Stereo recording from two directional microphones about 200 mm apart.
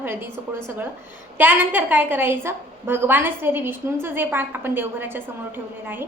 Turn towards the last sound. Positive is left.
turn(degrees=-10)  # may be behind; listen again after turning